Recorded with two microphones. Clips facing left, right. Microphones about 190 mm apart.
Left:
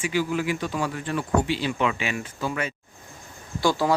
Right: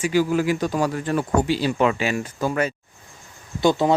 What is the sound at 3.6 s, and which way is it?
Speech, 20° right (ahead or behind).